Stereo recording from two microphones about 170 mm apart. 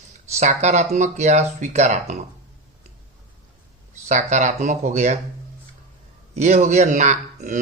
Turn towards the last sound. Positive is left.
turn(degrees=-45)  # may be behind; listen again after turning